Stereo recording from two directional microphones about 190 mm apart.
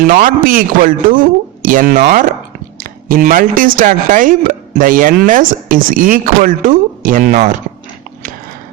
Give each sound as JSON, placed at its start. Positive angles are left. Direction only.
{"t": 0.0, "sound": "a woman's voice", "side_deg": -45}